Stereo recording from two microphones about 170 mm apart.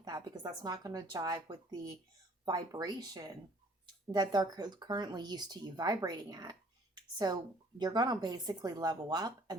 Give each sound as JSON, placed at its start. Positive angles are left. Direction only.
{"t": 0.6, "sound": "speech", "side_deg": -25}